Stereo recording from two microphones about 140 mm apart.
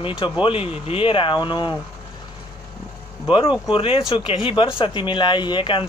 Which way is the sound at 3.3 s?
35° left (ahead or behind).